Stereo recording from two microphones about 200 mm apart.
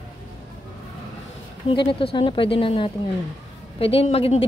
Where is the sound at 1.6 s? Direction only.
25° left (ahead or behind).